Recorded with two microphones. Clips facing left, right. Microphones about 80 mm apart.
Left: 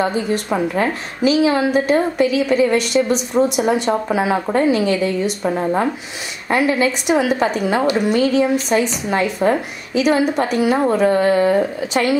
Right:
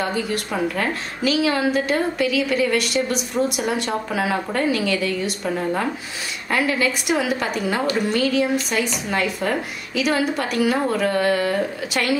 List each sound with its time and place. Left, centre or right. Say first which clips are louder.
0.0 s a woman's voice: left 5 dB; left